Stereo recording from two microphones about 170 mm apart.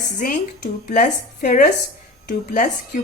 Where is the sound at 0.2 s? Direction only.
50° left (ahead or behind).